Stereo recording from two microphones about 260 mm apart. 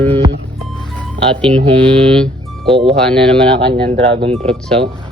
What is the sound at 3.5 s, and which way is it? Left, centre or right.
Speech, right.